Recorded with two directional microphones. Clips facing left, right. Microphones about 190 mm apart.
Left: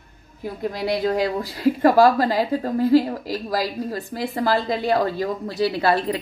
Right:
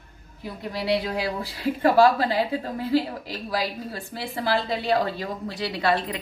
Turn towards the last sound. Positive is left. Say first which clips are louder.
# left 4 dB
turn(degrees=35)  # may be behind; listen again after turning